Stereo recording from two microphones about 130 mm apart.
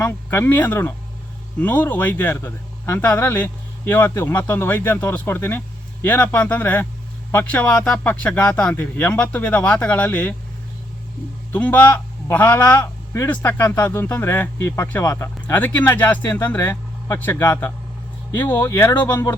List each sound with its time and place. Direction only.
0.0 s a man's voice: 20° left (ahead or behind)
11.5 s a man's voice: 15° left (ahead or behind)